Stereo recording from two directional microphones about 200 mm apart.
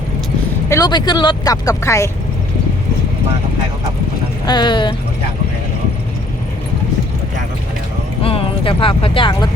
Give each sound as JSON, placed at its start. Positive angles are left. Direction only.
{"t": 0.7, "sound": "speech", "side_deg": 20}
{"t": 4.4, "sound": "speech", "side_deg": 25}
{"t": 8.2, "sound": "speech", "side_deg": 25}